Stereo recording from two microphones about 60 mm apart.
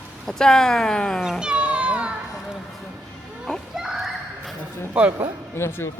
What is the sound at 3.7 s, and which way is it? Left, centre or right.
Children playing, centre.